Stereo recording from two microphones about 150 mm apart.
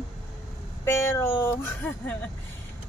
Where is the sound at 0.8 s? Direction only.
15° left (ahead or behind).